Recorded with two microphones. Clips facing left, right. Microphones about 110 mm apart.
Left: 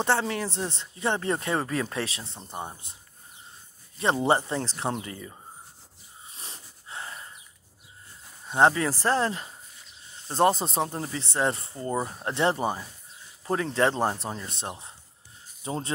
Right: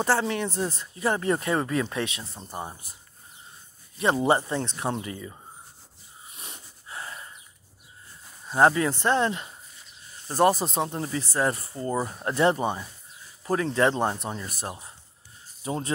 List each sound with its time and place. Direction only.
0.0 s speech: 30° left (ahead or behind)
2.5 s speech: centre (ahead or behind)
4.0 s speech: 30° left (ahead or behind)
6.2 s a sound: 30° left (ahead or behind)
8.5 s speech: 25° left (ahead or behind)
10.2 s speech: 25° left (ahead or behind)
13.4 s a sound: 30° left (ahead or behind)
13.7 s speech: 30° left (ahead or behind)